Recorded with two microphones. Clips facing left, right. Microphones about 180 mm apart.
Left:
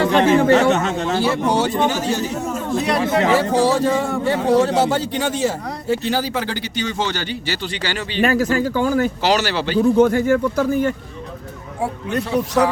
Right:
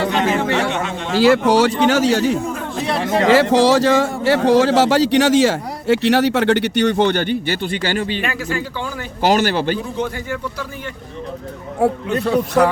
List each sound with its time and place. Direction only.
0.2 s a man's voice: 40° left (ahead or behind)
1.1 s speech: 90° right
3.2 s speech: 90° right; by 8.2 s 50° right (ahead or behind)
8.2 s a man's voice: 40° left (ahead or behind)
9.2 s speech: 50° right (ahead or behind)
9.7 s a man's voice: 45° left (ahead or behind)
11.8 s speech: 60° right (ahead or behind)